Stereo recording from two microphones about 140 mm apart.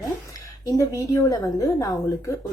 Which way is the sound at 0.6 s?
25° left (ahead or behind).